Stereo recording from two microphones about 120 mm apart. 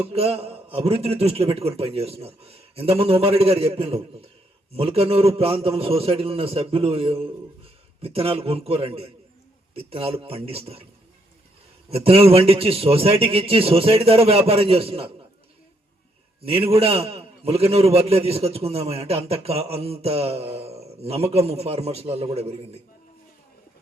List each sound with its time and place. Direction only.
0.1 s a man's voice: 55° right (ahead or behind)
11.9 s a man's voice: 55° right (ahead or behind)
16.4 s a man's voice: 50° right (ahead or behind)